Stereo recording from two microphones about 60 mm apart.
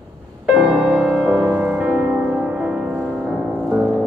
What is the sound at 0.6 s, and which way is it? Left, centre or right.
Music, centre.